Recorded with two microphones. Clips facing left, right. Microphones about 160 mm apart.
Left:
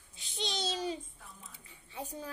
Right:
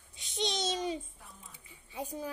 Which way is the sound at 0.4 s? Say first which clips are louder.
Right 3 dB; 20° right (ahead or behind).